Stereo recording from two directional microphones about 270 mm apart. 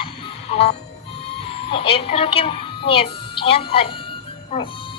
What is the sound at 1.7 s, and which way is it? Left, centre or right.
A woman's voice, centre.